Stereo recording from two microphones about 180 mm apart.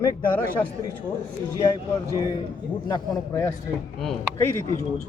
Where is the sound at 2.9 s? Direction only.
15° left (ahead or behind).